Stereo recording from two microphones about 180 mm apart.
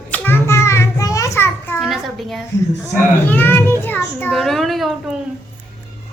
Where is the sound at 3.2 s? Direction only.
10° left (ahead or behind).